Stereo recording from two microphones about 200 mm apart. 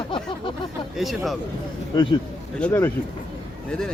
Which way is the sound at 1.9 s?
25° left (ahead or behind).